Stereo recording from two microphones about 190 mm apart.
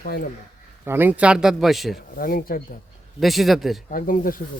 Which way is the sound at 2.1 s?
50° left (ahead or behind).